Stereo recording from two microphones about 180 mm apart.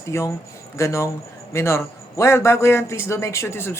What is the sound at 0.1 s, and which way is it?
A man's voice, 15° left (ahead or behind).